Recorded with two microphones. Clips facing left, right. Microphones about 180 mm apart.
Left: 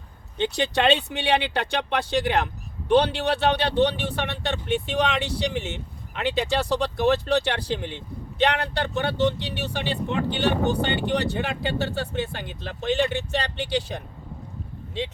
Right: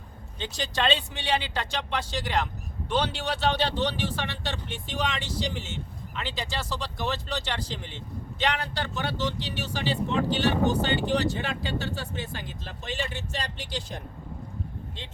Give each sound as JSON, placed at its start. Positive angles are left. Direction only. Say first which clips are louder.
{"t": 0.3, "sound": "speech", "louder": "left 7 dB", "side_deg": 65}